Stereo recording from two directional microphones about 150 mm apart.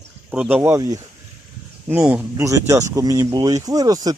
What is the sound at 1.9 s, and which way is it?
Speech, 10° right (ahead or behind).